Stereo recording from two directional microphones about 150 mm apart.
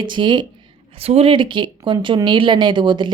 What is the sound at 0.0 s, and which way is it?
Speech, 30° right (ahead or behind).